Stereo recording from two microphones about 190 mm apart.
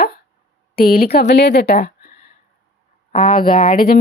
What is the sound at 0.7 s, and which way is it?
Speech, 50° left (ahead or behind).